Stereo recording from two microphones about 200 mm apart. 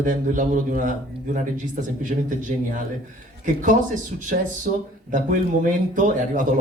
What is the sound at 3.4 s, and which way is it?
Speech, 40° right (ahead or behind).